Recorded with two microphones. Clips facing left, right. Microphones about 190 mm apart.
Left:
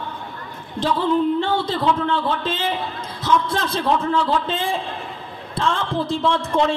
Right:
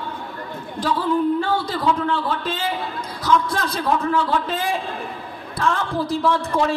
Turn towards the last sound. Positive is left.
turn(degrees=25)  # may be behind; listen again after turning